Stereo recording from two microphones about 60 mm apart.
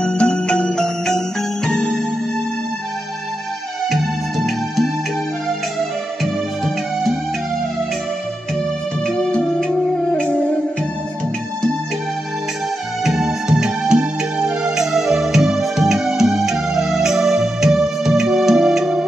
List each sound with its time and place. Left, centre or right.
0.0 s music: centre
3.9 s music: centre
6.2 s music: centre
9.0 s music: centre
13.0 s music: centre